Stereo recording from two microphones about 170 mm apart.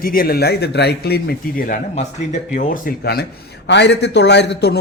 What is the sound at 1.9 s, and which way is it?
Speech, 45° left (ahead or behind).